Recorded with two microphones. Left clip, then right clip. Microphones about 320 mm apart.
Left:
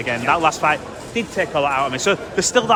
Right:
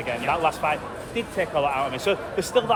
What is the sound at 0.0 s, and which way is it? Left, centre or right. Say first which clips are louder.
Speech: left 6 dB; left.